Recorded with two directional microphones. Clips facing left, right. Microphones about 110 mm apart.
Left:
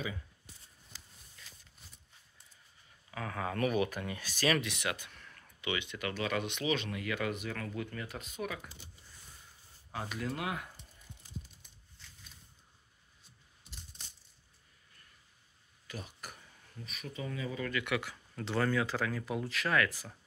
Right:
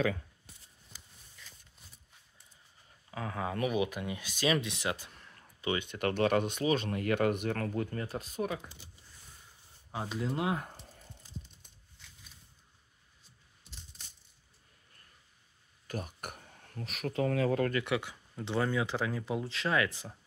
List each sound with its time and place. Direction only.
3.1 s speech: 20° right (ahead or behind)
10.0 s speech: 25° right (ahead or behind)
10.8 s a sound: 80° right
15.9 s speech: 50° right (ahead or behind); by 17.6 s 70° right (ahead or behind)
17.6 s speech: 30° right (ahead or behind)